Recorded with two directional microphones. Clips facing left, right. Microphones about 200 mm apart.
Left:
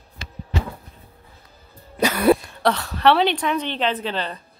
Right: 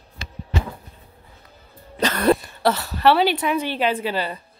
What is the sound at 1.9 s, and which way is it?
Speech, 10° left (ahead or behind).